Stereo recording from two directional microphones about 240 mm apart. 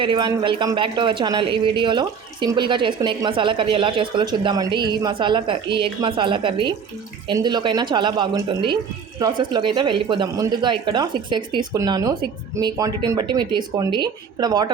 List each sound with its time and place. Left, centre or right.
0.0 s a man's voice: centre